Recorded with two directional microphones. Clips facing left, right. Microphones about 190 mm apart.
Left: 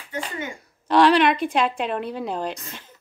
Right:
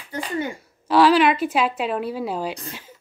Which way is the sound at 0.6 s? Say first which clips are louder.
Even; 5° right (ahead or behind).